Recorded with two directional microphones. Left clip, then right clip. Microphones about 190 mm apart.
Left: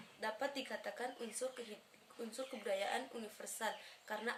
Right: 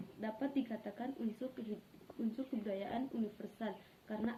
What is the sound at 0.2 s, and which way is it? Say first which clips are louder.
Speech: even; 20° left (ahead or behind).